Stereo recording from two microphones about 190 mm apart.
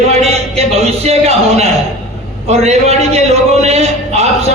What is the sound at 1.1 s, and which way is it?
A man's voice, 35° right (ahead or behind).